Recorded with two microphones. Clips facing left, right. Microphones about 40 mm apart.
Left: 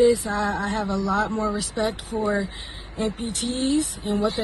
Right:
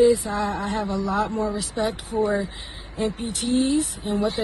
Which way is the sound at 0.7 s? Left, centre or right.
Left.